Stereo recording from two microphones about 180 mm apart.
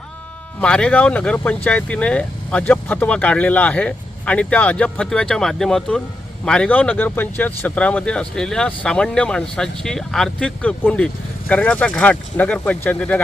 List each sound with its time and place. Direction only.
0.6 s speech: 5° left (ahead or behind)